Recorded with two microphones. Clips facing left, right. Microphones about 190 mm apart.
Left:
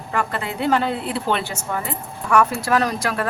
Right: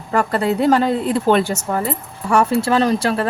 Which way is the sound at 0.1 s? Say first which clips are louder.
Right 7 dB; 40° right (ahead or behind).